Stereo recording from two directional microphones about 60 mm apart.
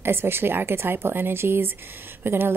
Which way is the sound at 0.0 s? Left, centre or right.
Right.